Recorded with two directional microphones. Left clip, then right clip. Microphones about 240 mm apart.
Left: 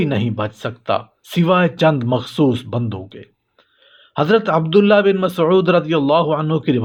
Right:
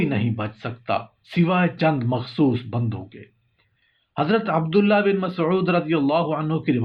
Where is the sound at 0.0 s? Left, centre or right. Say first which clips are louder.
Left 5 dB; left.